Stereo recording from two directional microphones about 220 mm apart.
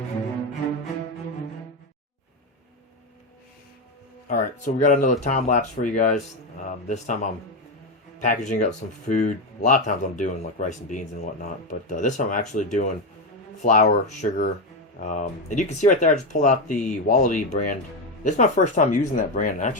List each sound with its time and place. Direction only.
4.3 s speech: 35° left (ahead or behind)